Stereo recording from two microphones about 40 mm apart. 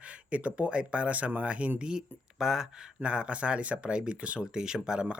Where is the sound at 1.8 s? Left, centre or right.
Centre.